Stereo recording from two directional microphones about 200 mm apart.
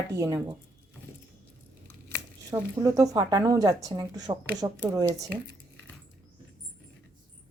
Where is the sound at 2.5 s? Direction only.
15° right (ahead or behind).